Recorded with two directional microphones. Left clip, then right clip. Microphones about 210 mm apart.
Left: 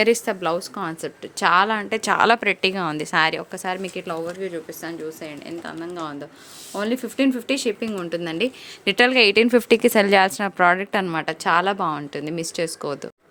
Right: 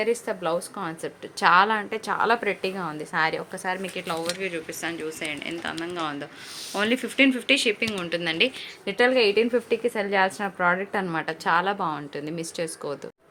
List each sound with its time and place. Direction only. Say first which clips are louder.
0.0 s a woman's voice: left 6 dB; 40° left (ahead or behind); by 11.0 s 55° left (ahead or behind)
11.0 s a woman's voice: left 4 dB; 35° left (ahead or behind)